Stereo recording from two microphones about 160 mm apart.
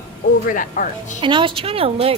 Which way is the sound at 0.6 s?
60° left (ahead or behind).